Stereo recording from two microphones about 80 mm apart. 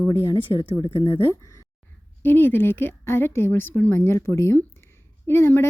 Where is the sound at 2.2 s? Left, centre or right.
Left.